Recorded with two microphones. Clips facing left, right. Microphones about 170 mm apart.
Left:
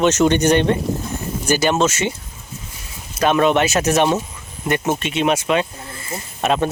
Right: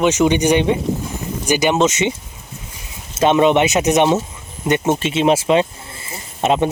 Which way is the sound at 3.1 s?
25° right (ahead or behind).